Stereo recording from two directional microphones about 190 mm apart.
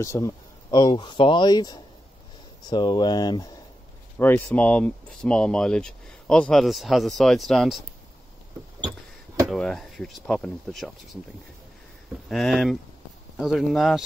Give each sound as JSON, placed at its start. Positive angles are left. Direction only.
{"t": 0.0, "sound": "speech", "side_deg": 15}
{"t": 4.2, "sound": "speech", "side_deg": 10}
{"t": 9.5, "sound": "speech", "side_deg": 0}
{"t": 12.3, "sound": "speech", "side_deg": 0}